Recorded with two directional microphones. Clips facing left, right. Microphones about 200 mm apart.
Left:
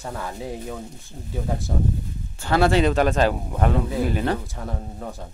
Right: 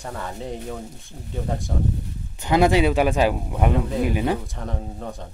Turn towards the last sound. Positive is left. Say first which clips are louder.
# right 1 dB
turn(degrees=-10)  # may be behind; listen again after turning